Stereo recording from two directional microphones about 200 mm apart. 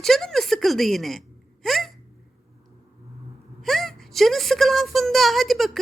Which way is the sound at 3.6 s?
Centre (ahead or behind).